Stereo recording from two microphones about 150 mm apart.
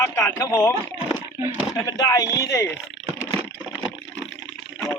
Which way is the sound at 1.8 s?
25° left (ahead or behind).